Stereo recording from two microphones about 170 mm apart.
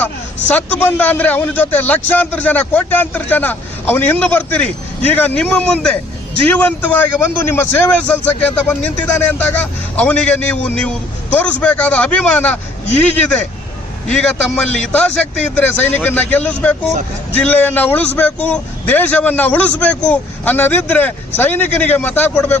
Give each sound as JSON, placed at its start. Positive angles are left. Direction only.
{"t": 0.0, "sound": "a man's voice", "side_deg": 10}